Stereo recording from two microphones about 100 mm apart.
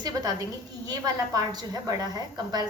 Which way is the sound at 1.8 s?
40° right (ahead or behind).